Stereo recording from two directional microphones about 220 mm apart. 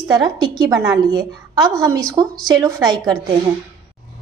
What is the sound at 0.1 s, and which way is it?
A woman's voice, 20° right (ahead or behind).